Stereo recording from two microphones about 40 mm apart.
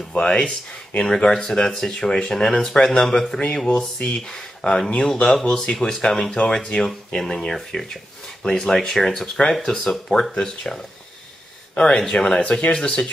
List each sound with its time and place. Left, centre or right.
0.2 s speech: centre
3.3 s speech: left
6.4 s speech: left
7.2 s speech: centre
11.7 s speech: centre
12.4 s speech: left